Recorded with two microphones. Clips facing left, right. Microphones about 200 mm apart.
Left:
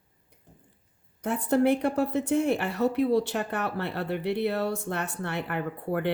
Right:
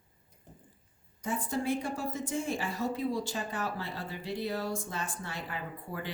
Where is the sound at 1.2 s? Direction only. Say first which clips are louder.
Left 9 dB; 65° left (ahead or behind).